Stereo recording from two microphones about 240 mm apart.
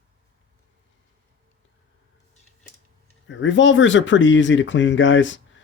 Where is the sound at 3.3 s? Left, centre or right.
Left.